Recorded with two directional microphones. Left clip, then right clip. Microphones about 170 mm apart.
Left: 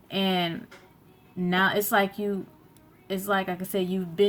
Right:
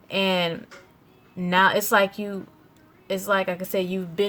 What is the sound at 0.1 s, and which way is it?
A woman's voice, 45° right (ahead or behind).